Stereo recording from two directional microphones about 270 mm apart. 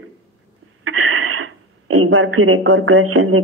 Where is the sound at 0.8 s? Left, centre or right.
Right.